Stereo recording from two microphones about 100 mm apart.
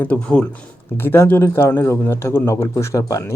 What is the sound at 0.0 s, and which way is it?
Speech, 15° left (ahead or behind).